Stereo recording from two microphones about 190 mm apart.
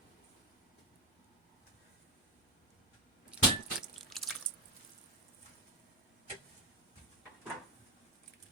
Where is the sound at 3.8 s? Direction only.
Centre (ahead or behind).